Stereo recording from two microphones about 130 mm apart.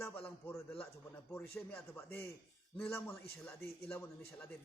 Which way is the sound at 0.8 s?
5° left (ahead or behind).